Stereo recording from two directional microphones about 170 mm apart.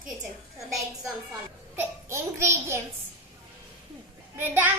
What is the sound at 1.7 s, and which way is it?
A child's voice, 15° right (ahead or behind).